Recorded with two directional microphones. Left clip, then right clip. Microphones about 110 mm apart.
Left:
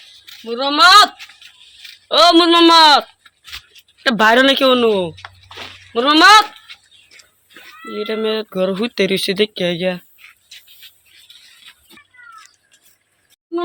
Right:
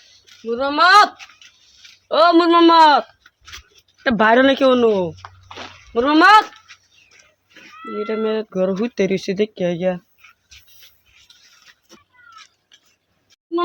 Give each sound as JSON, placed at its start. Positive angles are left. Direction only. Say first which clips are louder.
{"t": 0.6, "sound": "speech", "louder": "left 3 dB", "side_deg": -45}
{"t": 2.0, "sound": "speech", "louder": "left 3 dB", "side_deg": -15}
{"t": 3.5, "sound": "a sound", "louder": "left 5 dB", "side_deg": 5}
{"t": 4.2, "sound": "speech", "louder": "left 2 dB", "side_deg": -20}
{"t": 7.9, "sound": "speech", "louder": "left 1 dB", "side_deg": -20}